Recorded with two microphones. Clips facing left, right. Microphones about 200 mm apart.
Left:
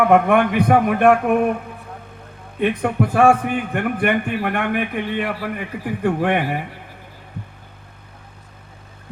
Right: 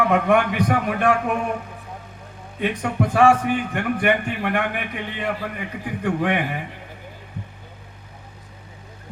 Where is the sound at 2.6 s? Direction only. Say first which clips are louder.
Left 4 dB; 55° left (ahead or behind).